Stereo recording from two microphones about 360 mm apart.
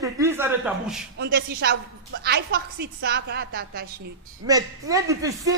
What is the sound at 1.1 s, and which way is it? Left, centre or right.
A woman's voice, right.